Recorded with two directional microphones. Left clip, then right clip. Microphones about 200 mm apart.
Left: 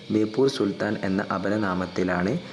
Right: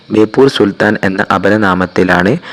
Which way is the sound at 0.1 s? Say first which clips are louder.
Right 14 dB; 35° right (ahead or behind).